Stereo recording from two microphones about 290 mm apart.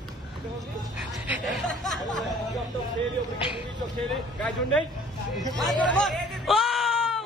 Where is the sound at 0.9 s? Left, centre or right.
Centre.